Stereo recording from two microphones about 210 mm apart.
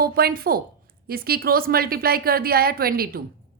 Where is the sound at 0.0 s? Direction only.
45° right (ahead or behind).